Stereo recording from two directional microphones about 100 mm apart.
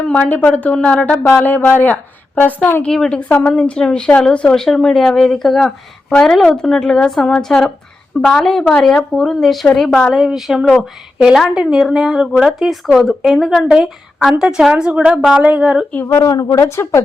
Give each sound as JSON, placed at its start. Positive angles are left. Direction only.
{"t": 0.0, "sound": "a woman's voice", "side_deg": 10}
{"t": 2.8, "sound": "a woman's voice", "side_deg": 5}
{"t": 16.0, "sound": "speech", "side_deg": 35}